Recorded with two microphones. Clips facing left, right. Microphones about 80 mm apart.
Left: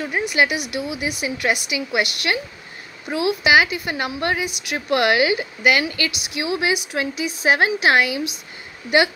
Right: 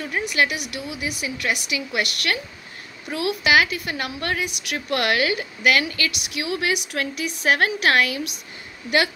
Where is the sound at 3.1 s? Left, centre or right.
Left.